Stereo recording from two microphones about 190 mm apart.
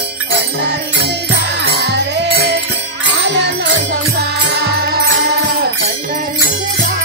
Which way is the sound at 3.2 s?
65° right (ahead or behind).